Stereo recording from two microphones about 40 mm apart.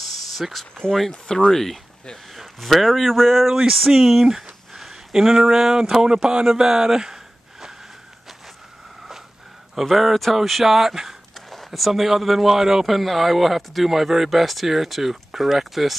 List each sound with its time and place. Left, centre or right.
0.3 s speech: centre
1.2 s speech: centre
6.1 s speech: right
6.4 s speech: centre
9.8 s speech: centre
11.3 s speech: centre
12.8 s speech: centre